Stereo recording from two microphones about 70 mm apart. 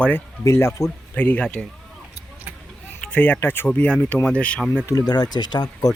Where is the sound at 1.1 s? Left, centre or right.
Left.